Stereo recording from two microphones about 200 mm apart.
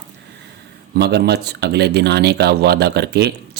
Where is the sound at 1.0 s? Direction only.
55° right (ahead or behind).